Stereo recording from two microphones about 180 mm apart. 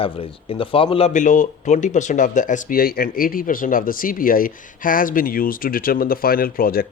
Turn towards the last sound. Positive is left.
turn(degrees=55)  # may be behind; listen again after turning